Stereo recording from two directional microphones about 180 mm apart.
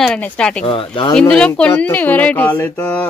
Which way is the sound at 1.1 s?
5° left (ahead or behind).